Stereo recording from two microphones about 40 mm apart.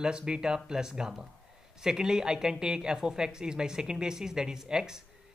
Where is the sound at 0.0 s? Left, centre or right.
Centre.